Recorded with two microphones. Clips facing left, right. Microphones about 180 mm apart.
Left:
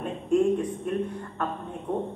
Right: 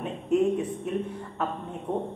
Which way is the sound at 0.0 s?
5° right (ahead or behind).